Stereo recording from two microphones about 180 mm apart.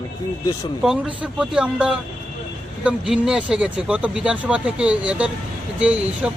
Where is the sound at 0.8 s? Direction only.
5° right (ahead or behind).